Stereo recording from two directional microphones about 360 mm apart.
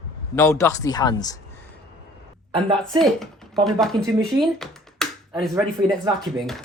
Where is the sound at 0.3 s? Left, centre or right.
Centre.